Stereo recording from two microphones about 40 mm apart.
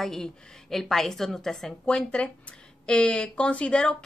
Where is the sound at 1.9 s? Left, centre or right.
Left.